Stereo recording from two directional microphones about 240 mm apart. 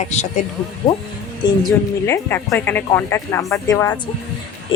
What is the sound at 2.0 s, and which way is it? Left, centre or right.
Speech, centre.